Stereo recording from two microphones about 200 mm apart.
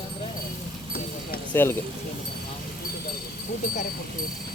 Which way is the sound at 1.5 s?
10° left (ahead or behind).